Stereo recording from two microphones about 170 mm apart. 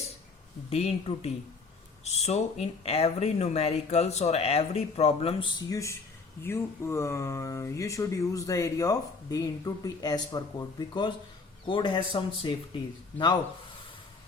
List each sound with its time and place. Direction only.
0.7 s speech: 35° left (ahead or behind)
5.6 s speech: 20° left (ahead or behind)